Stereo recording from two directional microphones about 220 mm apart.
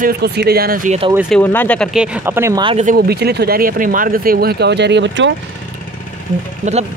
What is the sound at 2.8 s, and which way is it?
Speech, 45° right (ahead or behind).